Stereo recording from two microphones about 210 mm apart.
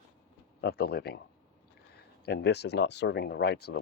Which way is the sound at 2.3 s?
50° left (ahead or behind).